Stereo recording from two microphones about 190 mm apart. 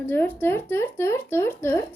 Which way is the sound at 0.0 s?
10° left (ahead or behind).